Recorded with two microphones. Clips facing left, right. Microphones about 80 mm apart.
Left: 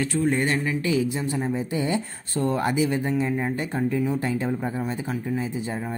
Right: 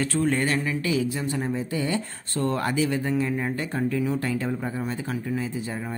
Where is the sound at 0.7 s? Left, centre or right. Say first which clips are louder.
Left 2 dB; left.